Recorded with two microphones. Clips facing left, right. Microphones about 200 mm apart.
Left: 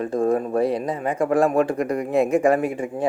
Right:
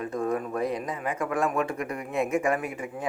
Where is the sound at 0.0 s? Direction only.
30° left (ahead or behind).